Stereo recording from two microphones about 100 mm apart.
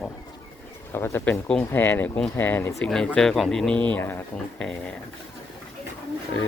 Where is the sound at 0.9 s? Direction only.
25° left (ahead or behind).